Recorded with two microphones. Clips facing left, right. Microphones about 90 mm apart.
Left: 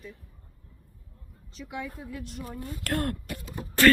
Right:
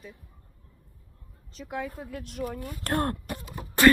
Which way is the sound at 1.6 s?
50° right (ahead or behind).